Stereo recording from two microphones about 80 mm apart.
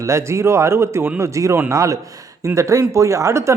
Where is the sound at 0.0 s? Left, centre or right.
Right.